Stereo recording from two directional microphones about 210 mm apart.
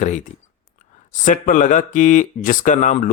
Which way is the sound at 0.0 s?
35° left (ahead or behind).